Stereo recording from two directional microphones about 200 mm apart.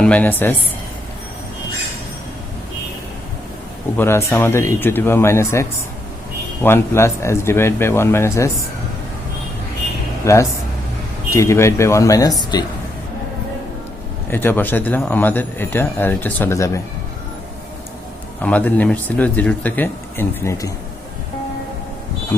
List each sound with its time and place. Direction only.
0.0 s a man's voice: 5° left (ahead or behind)
3.9 s a man's voice: 10° left (ahead or behind)
10.2 s a man's voice: 15° left (ahead or behind)
14.3 s a man's voice: 10° left (ahead or behind)
18.4 s a man's voice: 5° left (ahead or behind)